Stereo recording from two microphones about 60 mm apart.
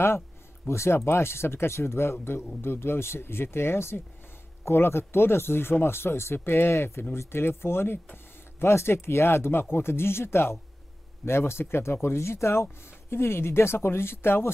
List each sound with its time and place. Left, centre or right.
0.7 s speech: left